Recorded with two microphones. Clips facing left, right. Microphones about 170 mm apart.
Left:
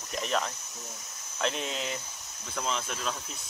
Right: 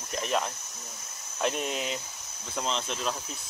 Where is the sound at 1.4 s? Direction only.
15° right (ahead or behind).